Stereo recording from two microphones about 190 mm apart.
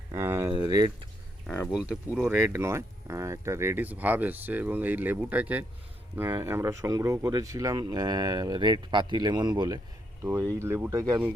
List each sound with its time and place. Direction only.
0.1 s a sound: 15° right (ahead or behind)
0.6 s speech: 20° right (ahead or behind)
1.5 s speech: 10° left (ahead or behind)
1.7 s speech: 5° right (ahead or behind)